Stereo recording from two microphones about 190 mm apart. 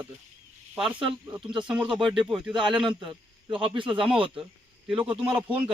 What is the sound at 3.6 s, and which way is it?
Speech, 25° right (ahead or behind).